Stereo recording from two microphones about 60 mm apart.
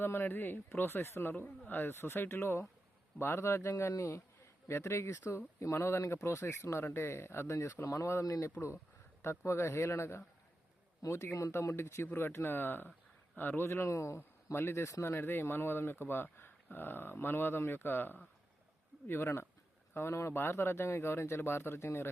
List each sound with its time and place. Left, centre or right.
0.0 s speech: left
3.9 s speech: left
4.7 s speech: left
9.2 s speech: left
11.7 s speech: left
13.7 s speech: left
14.2 s speech: left
14.8 s speech: left
15.1 s speech: left